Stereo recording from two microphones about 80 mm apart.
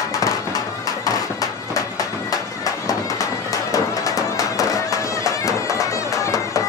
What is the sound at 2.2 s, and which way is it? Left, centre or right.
Music, left.